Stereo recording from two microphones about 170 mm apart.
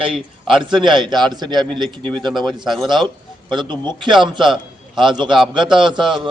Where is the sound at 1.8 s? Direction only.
5° left (ahead or behind).